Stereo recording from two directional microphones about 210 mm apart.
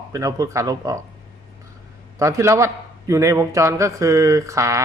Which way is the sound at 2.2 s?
15° right (ahead or behind).